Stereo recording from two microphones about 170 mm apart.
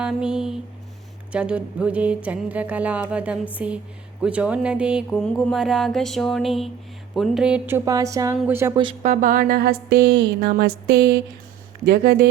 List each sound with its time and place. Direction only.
0.0 s mantra: 5° right (ahead or behind)
1.3 s speech: 5° right (ahead or behind)
4.2 s mantra: 5° right (ahead or behind)
7.9 s a woman's voice: 20° right (ahead or behind)
8.7 s a woman's voice: 30° right (ahead or behind)
9.0 s speech: 55° right (ahead or behind)